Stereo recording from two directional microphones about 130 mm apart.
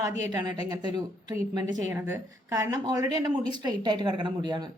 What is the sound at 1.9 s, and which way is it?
A woman's voice, 20° right (ahead or behind).